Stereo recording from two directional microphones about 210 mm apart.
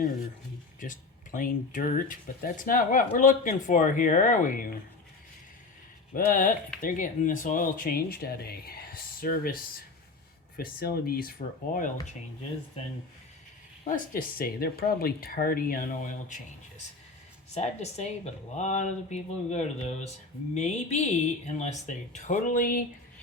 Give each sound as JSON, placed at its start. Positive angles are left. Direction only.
{"t": 0.8, "sound": "speech", "side_deg": 40}
{"t": 6.1, "sound": "speech", "side_deg": 40}
{"t": 13.8, "sound": "speech", "side_deg": 40}
{"t": 17.5, "sound": "speech", "side_deg": 30}